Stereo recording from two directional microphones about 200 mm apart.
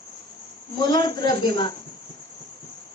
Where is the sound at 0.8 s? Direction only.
20° left (ahead or behind).